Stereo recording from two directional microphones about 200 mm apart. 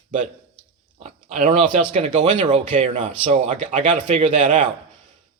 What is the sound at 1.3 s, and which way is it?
Speech, 35° right (ahead or behind).